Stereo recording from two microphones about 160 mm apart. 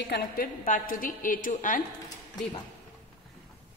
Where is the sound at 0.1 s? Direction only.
65° left (ahead or behind).